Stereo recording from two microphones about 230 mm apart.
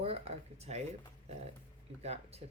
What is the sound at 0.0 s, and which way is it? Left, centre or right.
Speech, right.